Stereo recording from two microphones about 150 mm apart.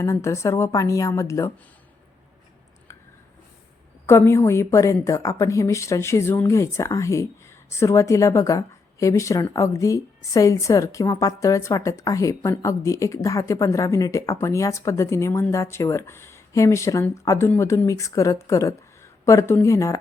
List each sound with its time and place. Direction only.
0.0 s speech: 20° left (ahead or behind)
4.0 s speech: 15° left (ahead or behind)